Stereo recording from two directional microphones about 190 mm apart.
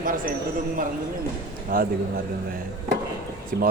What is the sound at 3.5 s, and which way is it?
Speech, 55° right (ahead or behind).